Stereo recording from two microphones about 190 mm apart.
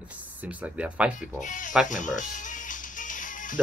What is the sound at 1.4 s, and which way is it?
Speech, 40° left (ahead or behind).